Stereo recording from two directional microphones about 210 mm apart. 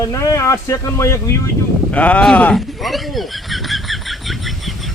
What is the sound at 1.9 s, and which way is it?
Fowl, 5° left (ahead or behind).